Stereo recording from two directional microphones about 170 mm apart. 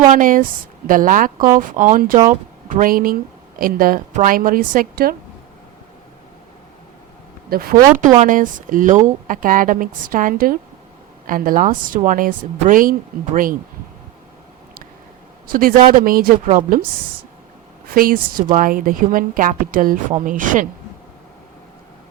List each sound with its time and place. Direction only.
0.1 s a woman's voice: 55° right (ahead or behind)
7.5 s a woman's voice: 60° right (ahead or behind)
8.2 s a woman's voice: 50° right (ahead or behind)
15.4 s a woman's voice: 55° right (ahead or behind)
17.8 s a woman's voice: 60° right (ahead or behind)